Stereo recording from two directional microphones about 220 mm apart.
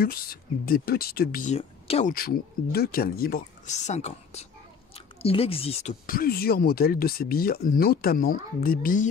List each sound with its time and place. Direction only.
0.0 s speech: 45° left (ahead or behind)
2.1 s speech: 40° left (ahead or behind)